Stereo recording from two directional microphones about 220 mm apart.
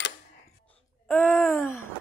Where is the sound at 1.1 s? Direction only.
5° left (ahead or behind).